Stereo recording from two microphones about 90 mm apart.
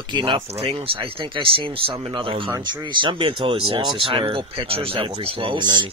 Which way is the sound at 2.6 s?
60° right (ahead or behind).